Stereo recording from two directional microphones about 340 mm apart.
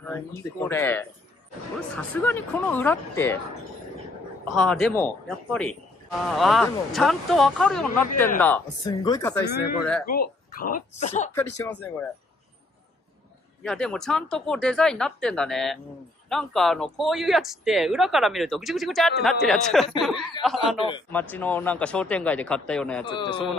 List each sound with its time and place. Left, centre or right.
0.0 s speech: centre
4.6 s speech: centre
9.4 s speech: left
11.3 s speech: centre
13.6 s speech: centre